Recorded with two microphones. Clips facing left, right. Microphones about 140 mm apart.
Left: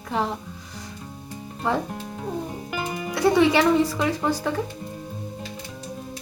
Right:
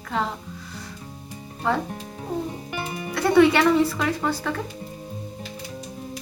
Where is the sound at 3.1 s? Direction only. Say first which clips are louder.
Right 1 dB; 15° left (ahead or behind).